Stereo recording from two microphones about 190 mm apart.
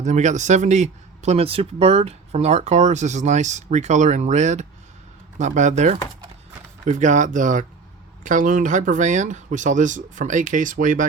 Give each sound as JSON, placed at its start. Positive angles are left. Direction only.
{"t": 0.0, "sound": "speech", "side_deg": -40}